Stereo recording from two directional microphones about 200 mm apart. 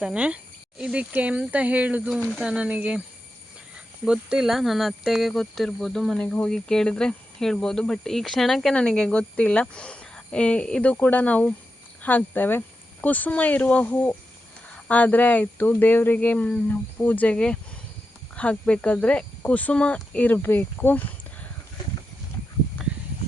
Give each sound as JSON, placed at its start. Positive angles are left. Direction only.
{"t": 0.0, "sound": "speech", "side_deg": -5}
{"t": 4.0, "sound": "speech", "side_deg": -5}